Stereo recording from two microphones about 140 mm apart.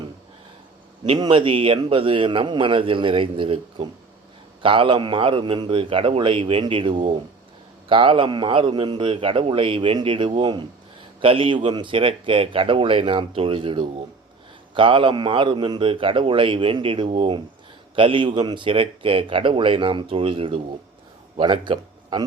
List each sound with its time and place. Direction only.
1.2 s a man's voice: 35° right (ahead or behind)